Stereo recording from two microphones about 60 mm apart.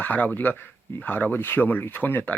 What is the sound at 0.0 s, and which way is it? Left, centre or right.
Speech, left.